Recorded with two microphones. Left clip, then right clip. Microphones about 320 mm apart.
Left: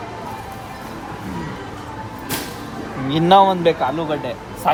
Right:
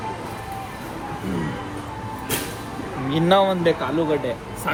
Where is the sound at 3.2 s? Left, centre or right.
Left.